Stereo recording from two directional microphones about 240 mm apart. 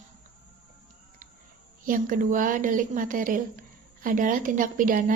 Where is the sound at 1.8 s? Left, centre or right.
Right.